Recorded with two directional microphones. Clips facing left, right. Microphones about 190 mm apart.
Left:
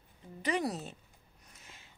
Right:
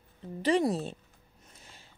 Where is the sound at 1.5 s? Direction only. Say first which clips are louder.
Right 2 dB; 30° right (ahead or behind).